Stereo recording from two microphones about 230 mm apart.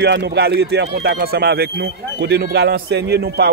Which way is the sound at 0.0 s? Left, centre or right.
Right.